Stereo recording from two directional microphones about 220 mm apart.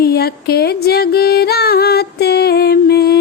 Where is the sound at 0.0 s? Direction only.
45° left (ahead or behind).